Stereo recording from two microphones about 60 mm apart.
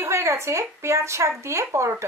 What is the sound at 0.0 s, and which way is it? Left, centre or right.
A woman's voice, right.